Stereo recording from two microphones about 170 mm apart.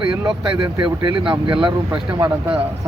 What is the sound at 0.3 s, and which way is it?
Speech, 25° right (ahead or behind).